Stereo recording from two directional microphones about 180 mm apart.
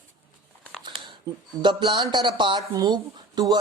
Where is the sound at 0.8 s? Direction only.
25° right (ahead or behind).